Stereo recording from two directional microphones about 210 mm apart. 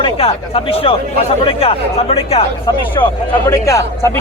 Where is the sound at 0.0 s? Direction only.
25° left (ahead or behind).